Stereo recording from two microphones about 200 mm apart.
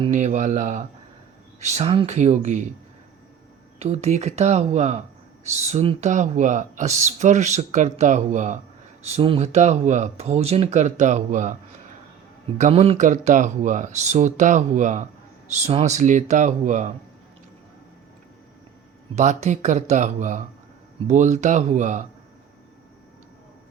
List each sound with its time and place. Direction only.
0.1 s speech: 35° right (ahead or behind)
3.8 s speech: 30° right (ahead or behind)
12.5 s speech: 35° right (ahead or behind)
19.1 s speech: 35° right (ahead or behind)